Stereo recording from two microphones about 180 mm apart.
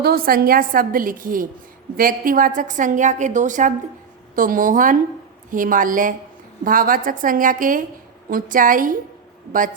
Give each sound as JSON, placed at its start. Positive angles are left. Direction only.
{"t": 0.0, "sound": "a woman's voice", "side_deg": -55}